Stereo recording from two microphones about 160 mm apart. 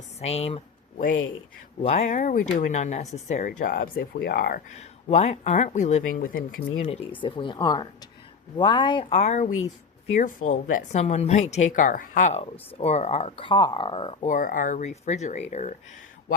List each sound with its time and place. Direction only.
0.2 s speech: 40° left (ahead or behind)
1.8 s speech: 45° left (ahead or behind)
3.4 s speech: 60° left (ahead or behind)
5.0 s speech: 45° left (ahead or behind); by 6.4 s 60° left (ahead or behind)
6.8 s speech: 40° left (ahead or behind); by 11.0 s 55° left (ahead or behind)
11.0 s speech: 40° left (ahead or behind)
14.3 s speech: 55° left (ahead or behind)